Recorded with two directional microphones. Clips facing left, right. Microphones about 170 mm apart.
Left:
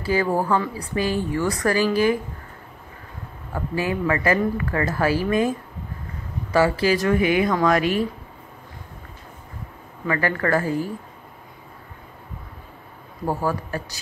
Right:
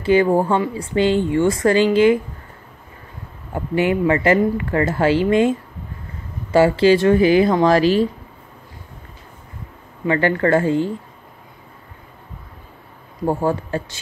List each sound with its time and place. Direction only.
0.0 s speech: 20° right (ahead or behind)
3.5 s speech: 20° right (ahead or behind)
10.0 s speech: 25° right (ahead or behind)
13.2 s speech: 25° right (ahead or behind)